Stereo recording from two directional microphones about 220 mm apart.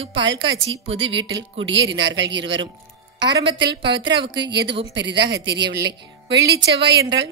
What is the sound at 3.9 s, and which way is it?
Speech, 55° right (ahead or behind).